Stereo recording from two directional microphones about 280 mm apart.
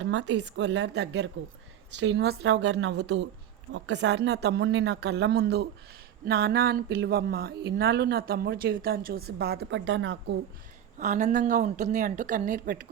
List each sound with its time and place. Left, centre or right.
0.0 s speech: right
10.9 s a woman's voice: right